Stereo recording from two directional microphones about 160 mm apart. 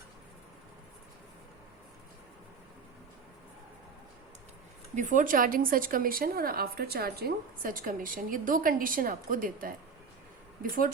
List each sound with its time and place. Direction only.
4.9 s speech: 55° right (ahead or behind)